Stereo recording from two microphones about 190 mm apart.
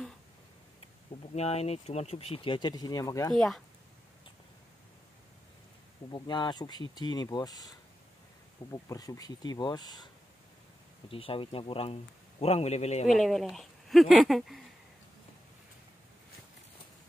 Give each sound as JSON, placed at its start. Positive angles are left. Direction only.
{"t": 1.3, "sound": "speech", "side_deg": 35}
{"t": 3.3, "sound": "speech", "side_deg": 0}
{"t": 6.0, "sound": "speech", "side_deg": 20}
{"t": 8.7, "sound": "speech", "side_deg": 20}
{"t": 11.1, "sound": "a man's voice", "side_deg": 30}
{"t": 13.0, "sound": "speech", "side_deg": 0}